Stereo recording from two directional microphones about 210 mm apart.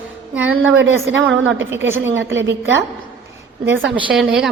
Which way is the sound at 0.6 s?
65° right (ahead or behind).